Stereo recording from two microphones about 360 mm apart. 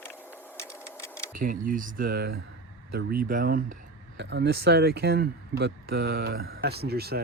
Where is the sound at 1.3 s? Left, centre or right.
Right.